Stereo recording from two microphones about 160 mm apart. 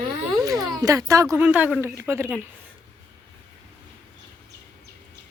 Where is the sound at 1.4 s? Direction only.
10° right (ahead or behind).